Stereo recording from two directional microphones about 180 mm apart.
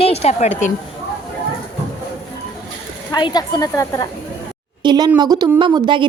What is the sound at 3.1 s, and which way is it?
Speech, 25° left (ahead or behind).